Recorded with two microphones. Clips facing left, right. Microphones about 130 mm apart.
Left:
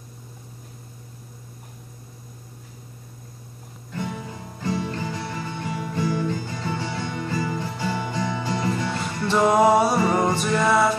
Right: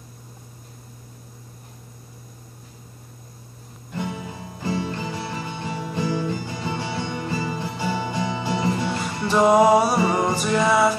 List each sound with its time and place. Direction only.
3.9 s music: 15° right (ahead or behind)
6.9 s music: 25° right (ahead or behind); by 8.4 s 5° right (ahead or behind)
8.4 s music: 20° right (ahead or behind)
8.7 s music: 5° right (ahead or behind)